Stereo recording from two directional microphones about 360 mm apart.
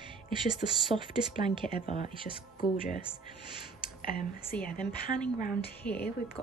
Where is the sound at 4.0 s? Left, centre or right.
Left.